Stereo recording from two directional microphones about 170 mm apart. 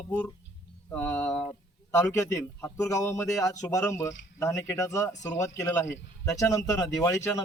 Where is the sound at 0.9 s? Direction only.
15° left (ahead or behind).